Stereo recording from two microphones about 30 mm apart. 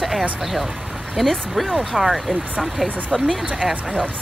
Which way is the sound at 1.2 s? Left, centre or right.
Centre.